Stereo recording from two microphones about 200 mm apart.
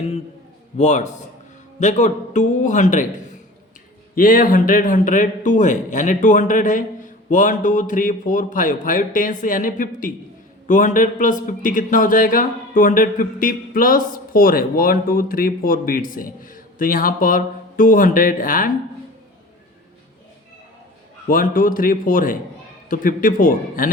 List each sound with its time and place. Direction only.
0.8 s a man's voice: 35° left (ahead or behind)
4.1 s a man's voice: 45° left (ahead or behind)
21.2 s speech: 45° left (ahead or behind)